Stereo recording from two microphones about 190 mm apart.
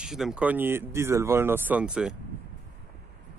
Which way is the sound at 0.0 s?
5° right (ahead or behind).